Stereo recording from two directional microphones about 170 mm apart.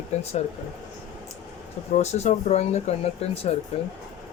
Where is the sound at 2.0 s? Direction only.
40° left (ahead or behind).